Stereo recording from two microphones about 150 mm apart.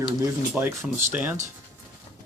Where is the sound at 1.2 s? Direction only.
15° right (ahead or behind).